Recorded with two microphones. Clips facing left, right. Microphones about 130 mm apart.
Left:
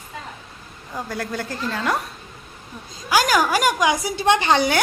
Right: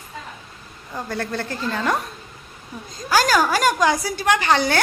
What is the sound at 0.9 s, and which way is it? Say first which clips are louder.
A woman's voice: right 1 dB; 5° left (ahead or behind).